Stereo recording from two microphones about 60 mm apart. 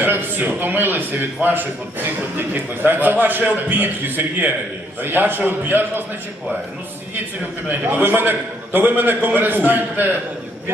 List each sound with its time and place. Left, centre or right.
0.0 s a man's voice: right
7.7 s a man's voice: right